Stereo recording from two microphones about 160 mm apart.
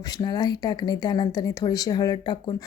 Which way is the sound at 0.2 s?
25° left (ahead or behind).